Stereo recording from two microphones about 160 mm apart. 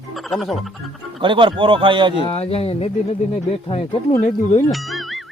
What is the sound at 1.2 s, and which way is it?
Speech, 30° right (ahead or behind).